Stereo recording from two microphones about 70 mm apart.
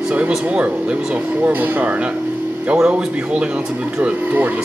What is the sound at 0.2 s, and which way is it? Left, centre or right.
Speech, centre.